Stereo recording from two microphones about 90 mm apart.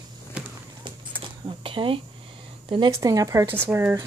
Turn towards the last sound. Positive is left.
turn(degrees=-20)  # may be behind; listen again after turning